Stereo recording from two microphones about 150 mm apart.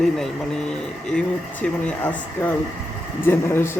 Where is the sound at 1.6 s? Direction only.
10° left (ahead or behind).